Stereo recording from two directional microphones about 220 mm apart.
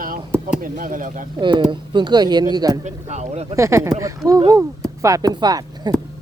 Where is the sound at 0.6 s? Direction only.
40° right (ahead or behind).